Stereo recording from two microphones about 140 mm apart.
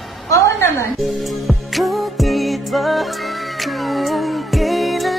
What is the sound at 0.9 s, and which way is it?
Music, centre (ahead or behind).